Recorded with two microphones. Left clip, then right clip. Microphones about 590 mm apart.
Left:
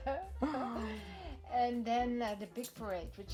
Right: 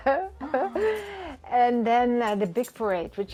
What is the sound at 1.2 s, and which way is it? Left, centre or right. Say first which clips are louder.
Speech: right 12 dB; right.